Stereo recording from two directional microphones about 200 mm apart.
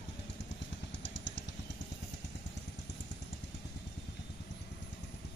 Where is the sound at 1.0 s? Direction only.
65° left (ahead or behind).